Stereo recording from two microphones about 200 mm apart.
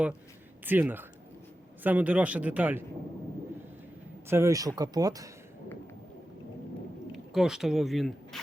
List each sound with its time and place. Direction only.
0.6 s speech: 10° right (ahead or behind)
4.3 s speech: 15° right (ahead or behind)
7.1 s speech: centre (ahead or behind)